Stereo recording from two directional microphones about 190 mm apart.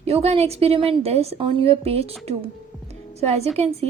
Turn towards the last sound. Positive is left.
turn(degrees=-30)  # may be behind; listen again after turning